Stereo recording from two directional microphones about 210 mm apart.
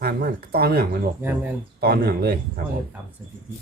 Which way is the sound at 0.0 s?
45° right (ahead or behind).